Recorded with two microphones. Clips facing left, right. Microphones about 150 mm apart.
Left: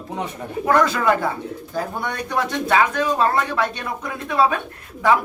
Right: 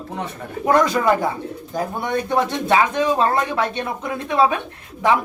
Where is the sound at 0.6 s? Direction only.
20° right (ahead or behind).